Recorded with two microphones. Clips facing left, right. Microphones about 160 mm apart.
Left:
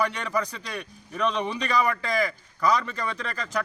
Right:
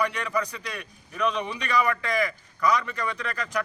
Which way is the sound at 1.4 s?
35° left (ahead or behind).